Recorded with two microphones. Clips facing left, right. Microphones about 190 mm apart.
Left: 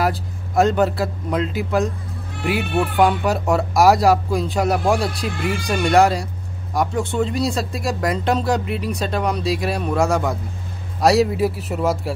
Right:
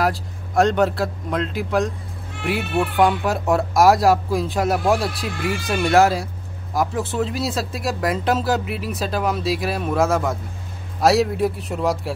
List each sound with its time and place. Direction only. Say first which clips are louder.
0.0 s speech: even; centre (ahead or behind)